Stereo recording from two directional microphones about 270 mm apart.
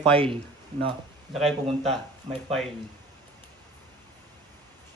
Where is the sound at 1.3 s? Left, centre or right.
Centre.